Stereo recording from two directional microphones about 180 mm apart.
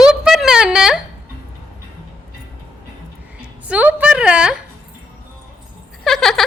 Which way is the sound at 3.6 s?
5° right (ahead or behind).